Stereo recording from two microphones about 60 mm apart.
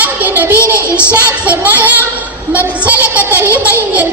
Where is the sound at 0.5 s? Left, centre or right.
Left.